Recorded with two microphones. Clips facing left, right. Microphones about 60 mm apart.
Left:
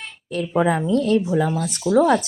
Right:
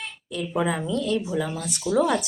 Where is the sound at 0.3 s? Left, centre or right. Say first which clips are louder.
Left 6 dB; left.